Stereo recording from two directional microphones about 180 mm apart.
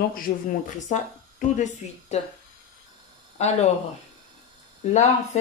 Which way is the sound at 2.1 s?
35° left (ahead or behind).